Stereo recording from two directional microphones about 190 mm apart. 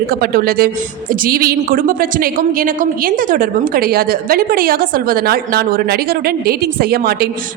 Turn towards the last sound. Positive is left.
turn(degrees=-50)  # may be behind; listen again after turning